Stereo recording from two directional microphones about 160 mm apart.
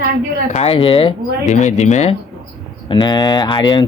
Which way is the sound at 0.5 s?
40° left (ahead or behind).